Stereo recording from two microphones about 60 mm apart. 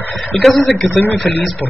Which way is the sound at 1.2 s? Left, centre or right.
Left.